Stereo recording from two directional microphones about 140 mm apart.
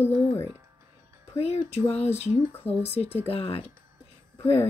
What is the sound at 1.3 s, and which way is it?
Speech, 50° left (ahead or behind).